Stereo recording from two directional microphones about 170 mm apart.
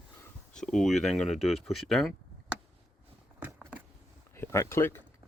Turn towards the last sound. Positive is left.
turn(degrees=15)  # may be behind; listen again after turning